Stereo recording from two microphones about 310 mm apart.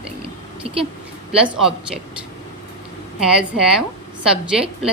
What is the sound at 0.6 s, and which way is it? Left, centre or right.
Speech, centre.